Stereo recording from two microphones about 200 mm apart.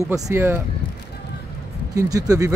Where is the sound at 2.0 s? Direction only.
15° right (ahead or behind).